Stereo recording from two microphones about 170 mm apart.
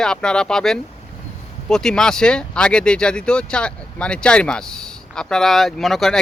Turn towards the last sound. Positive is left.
turn(degrees=0)  # may be behind; listen again after turning